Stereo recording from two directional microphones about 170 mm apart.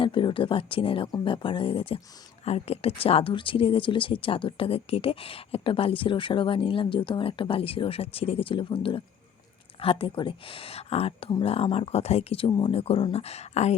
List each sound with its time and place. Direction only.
0.0 s speech: 30° left (ahead or behind)